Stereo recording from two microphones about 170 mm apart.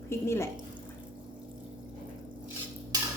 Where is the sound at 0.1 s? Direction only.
15° left (ahead or behind).